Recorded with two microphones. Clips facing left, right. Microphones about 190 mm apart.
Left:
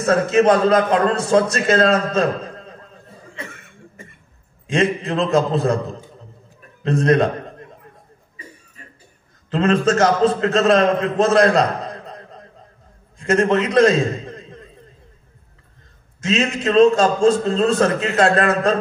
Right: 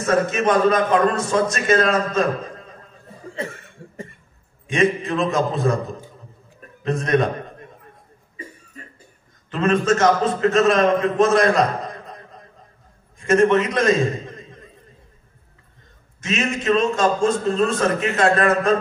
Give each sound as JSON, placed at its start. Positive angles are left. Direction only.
{"t": 0.0, "sound": "a man's voice", "side_deg": 35}
{"t": 3.3, "sound": "chuckle", "side_deg": -35}
{"t": 5.0, "sound": "a man's voice", "side_deg": 30}
{"t": 9.8, "sound": "a man's voice", "side_deg": 35}
{"t": 16.3, "sound": "a man's voice", "side_deg": 35}